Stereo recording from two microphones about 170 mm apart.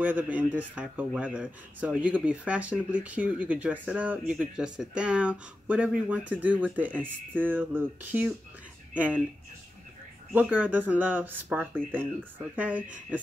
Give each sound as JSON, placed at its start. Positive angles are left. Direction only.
{"t": 0.0, "sound": "speech", "side_deg": -10}
{"t": 10.5, "sound": "speech", "side_deg": -10}